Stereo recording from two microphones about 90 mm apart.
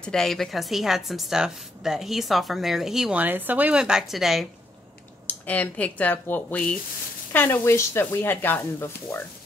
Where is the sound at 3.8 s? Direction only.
5° right (ahead or behind).